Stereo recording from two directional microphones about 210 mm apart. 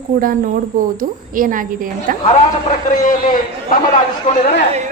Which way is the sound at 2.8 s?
35° left (ahead or behind).